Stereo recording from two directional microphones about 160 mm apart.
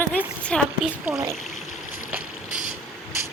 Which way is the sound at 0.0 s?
10° left (ahead or behind).